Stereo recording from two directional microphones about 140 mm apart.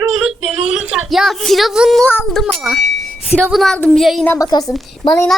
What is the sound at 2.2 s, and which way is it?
Speech, centre (ahead or behind).